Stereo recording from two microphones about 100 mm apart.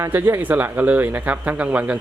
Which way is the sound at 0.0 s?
20° right (ahead or behind).